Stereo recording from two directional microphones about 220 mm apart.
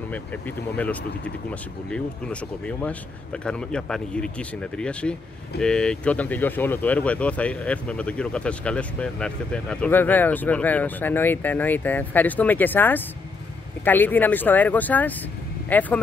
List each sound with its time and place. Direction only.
0.1 s speech: 5° left (ahead or behind)